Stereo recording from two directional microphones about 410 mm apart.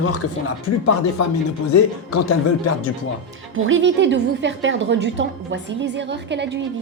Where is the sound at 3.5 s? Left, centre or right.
Right.